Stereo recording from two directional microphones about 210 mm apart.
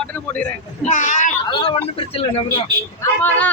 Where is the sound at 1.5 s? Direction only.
25° left (ahead or behind).